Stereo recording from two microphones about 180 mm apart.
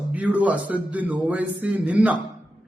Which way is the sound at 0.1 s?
10° right (ahead or behind).